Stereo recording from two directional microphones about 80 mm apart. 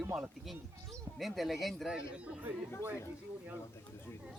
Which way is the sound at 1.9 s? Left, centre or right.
Centre.